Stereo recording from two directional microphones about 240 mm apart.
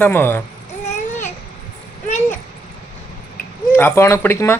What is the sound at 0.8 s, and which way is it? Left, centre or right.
Babbling, left.